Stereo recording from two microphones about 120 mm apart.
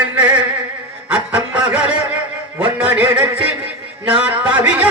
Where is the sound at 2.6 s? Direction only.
10° right (ahead or behind).